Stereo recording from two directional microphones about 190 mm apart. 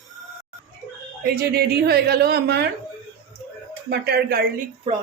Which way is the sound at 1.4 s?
55° right (ahead or behind).